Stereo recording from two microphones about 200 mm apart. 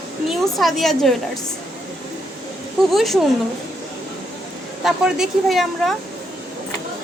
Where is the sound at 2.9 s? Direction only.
Centre (ahead or behind).